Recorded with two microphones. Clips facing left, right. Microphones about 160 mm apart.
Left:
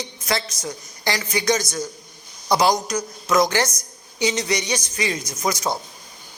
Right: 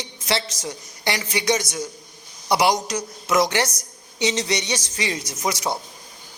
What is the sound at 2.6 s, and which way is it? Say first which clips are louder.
A woman's voice: left 1 dB; 20° right (ahead or behind).